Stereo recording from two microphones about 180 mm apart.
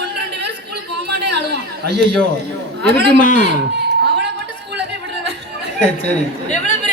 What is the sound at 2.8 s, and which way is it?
Speech, 65° right (ahead or behind).